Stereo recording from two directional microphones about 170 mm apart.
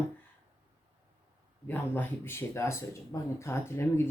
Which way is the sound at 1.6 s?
10° left (ahead or behind).